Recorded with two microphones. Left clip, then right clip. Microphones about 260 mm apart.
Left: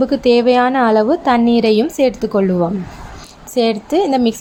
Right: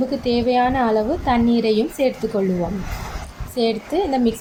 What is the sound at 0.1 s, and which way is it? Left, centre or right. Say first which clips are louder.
A woman's voice: left 8 dB; left.